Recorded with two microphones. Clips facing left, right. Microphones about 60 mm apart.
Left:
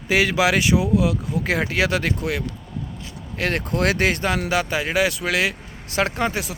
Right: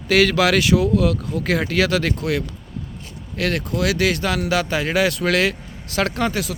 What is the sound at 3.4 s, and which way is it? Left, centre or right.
Speech, left.